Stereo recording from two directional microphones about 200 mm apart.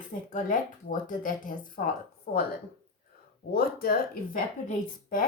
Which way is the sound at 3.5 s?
50° left (ahead or behind).